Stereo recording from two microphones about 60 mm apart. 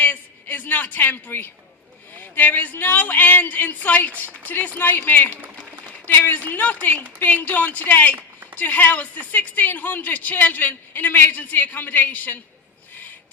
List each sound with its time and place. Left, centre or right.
0.0 s a man's voice: left